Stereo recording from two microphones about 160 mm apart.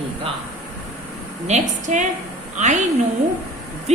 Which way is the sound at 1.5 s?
45° right (ahead or behind).